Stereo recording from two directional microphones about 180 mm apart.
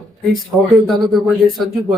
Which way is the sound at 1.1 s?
Centre (ahead or behind).